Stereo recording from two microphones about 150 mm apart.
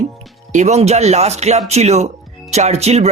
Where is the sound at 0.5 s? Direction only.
50° right (ahead or behind).